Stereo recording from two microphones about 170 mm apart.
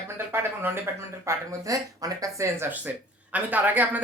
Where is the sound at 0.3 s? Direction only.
15° right (ahead or behind).